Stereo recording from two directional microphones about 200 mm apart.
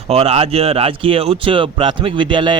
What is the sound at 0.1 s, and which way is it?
Speech, 30° right (ahead or behind).